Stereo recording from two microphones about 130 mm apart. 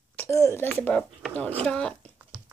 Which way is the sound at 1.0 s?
5° left (ahead or behind).